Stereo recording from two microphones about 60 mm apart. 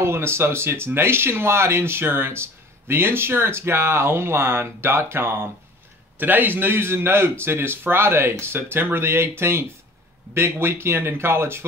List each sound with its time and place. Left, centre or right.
0.0 s speech: right
6.1 s speech: right